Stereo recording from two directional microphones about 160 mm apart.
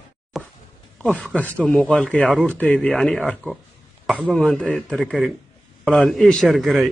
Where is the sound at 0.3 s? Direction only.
Centre (ahead or behind).